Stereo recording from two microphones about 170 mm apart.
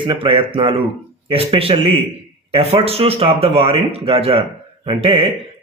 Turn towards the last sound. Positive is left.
turn(degrees=-35)  # may be behind; listen again after turning